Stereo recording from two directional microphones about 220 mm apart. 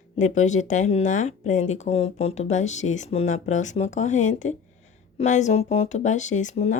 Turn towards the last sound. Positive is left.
turn(degrees=30)  # may be behind; listen again after turning